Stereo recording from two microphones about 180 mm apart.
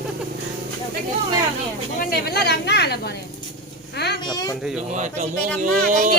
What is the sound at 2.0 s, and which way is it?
Speech, 60° left (ahead or behind).